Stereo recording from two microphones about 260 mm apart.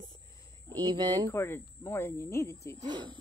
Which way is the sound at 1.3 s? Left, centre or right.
Centre.